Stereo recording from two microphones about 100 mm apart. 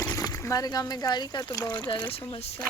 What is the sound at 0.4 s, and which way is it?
Speech, 35° left (ahead or behind).